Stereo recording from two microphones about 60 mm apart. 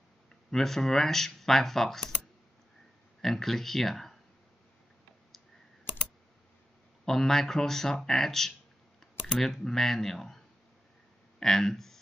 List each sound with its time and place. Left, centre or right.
0.5 s speech: centre
3.2 s speech: centre
7.1 s speech: centre